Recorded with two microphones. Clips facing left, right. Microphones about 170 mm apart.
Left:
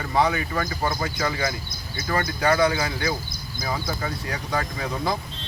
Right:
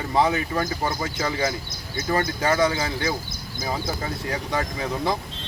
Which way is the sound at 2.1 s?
25° right (ahead or behind).